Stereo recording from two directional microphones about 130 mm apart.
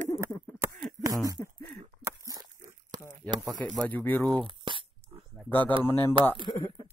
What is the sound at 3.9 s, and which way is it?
Speech, 15° left (ahead or behind).